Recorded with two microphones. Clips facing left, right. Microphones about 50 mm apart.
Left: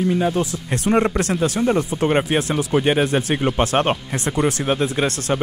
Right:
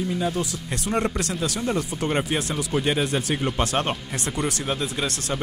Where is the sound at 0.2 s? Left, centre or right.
Left.